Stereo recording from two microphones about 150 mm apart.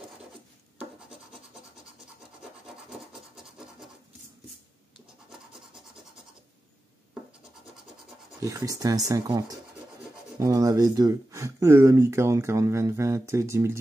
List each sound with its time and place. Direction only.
3.0 s scratch: 5° right (ahead or behind)
8.4 s speech: 20° right (ahead or behind)